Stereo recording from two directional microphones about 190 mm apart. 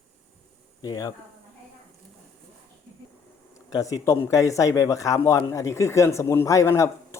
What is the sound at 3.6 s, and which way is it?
A man's voice, 20° left (ahead or behind).